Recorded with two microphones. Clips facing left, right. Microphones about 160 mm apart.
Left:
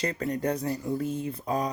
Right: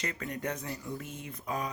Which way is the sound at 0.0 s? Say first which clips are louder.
Left 8 dB; 35° left (ahead or behind).